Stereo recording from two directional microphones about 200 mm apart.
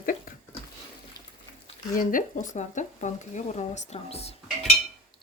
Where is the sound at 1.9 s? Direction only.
40° left (ahead or behind).